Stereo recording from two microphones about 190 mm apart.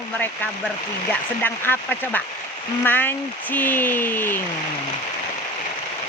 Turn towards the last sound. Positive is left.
turn(degrees=10)  # may be behind; listen again after turning